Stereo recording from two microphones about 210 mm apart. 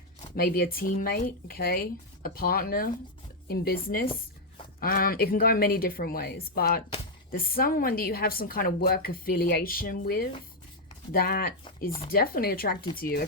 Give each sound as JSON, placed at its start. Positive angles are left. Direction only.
{"t": 0.3, "sound": "a woman's voice", "side_deg": 45}